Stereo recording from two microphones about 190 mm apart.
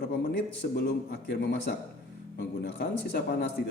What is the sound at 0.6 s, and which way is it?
Speech, 55° left (ahead or behind).